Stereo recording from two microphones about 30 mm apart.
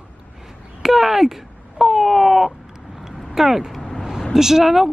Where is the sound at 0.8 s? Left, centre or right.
Centre.